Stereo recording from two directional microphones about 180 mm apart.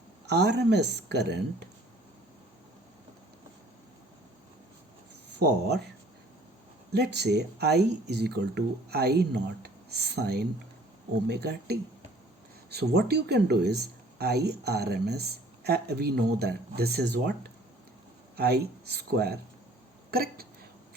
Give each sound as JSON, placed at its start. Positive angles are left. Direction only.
{"t": 0.3, "sound": "a woman's voice", "side_deg": -70}
{"t": 5.4, "sound": "speech", "side_deg": -65}
{"t": 6.9, "sound": "speech", "side_deg": -65}
{"t": 18.3, "sound": "speech", "side_deg": -60}